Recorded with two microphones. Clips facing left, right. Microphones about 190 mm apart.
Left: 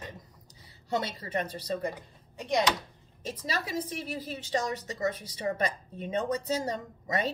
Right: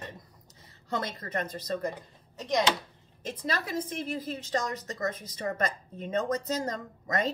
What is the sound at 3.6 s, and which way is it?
Speech, 15° left (ahead or behind).